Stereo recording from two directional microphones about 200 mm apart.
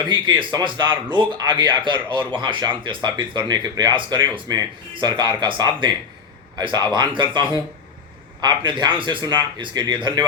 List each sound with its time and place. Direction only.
0.1 s speech: 25° right (ahead or behind)
8.4 s speech: 25° right (ahead or behind)